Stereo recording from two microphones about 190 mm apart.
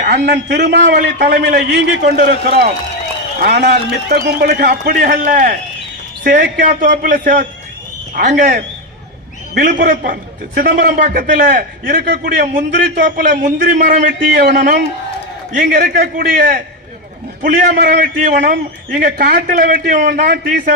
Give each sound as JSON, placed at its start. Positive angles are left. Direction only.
{"t": 0.0, "sound": "a man's voice", "side_deg": -55}